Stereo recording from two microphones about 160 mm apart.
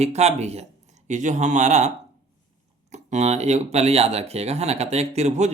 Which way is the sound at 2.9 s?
45° right (ahead or behind).